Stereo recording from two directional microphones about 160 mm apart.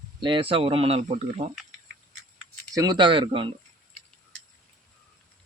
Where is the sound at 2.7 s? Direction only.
25° right (ahead or behind).